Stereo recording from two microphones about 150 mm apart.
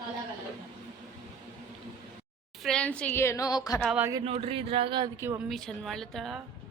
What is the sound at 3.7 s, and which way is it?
Speech, 5° right (ahead or behind).